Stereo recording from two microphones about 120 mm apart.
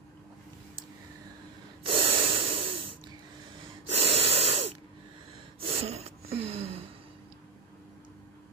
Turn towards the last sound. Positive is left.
turn(degrees=-60)  # may be behind; listen again after turning